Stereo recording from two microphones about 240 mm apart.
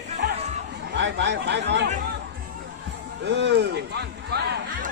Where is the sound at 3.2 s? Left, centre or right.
Right.